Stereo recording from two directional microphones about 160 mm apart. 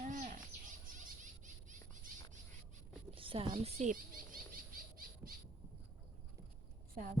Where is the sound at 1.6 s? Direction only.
50° right (ahead or behind).